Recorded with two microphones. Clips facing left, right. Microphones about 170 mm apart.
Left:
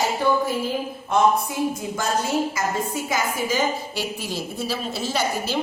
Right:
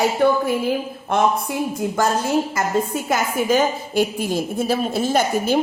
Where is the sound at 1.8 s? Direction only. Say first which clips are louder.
Right 5 dB; 60° right (ahead or behind).